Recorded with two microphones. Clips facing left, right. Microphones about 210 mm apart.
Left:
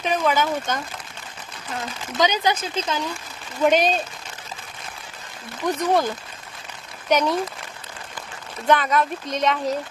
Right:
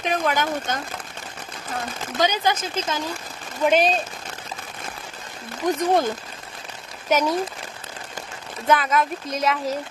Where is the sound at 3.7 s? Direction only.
Centre (ahead or behind).